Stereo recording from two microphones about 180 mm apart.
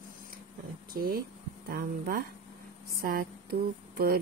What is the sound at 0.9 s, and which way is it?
Speech, 55° right (ahead or behind).